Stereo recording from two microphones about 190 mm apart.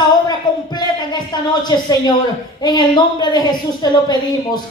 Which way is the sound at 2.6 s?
20° left (ahead or behind).